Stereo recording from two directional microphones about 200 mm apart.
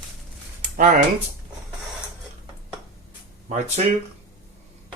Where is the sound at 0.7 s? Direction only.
40° right (ahead or behind).